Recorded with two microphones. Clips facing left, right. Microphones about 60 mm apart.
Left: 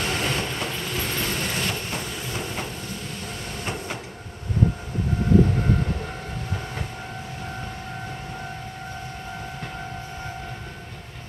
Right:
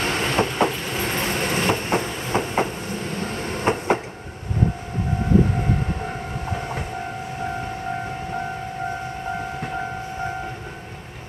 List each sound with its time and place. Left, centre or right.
0.0 s train: right
1.1 s train: right